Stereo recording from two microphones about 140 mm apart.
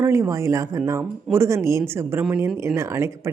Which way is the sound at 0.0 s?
20° right (ahead or behind).